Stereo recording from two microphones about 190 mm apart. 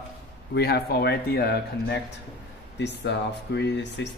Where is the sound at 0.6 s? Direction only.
55° left (ahead or behind).